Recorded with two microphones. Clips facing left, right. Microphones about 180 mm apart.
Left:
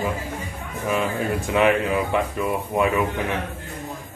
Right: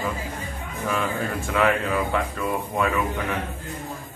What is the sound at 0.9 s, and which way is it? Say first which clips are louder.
Speech: left 3 dB; 15° left (ahead or behind).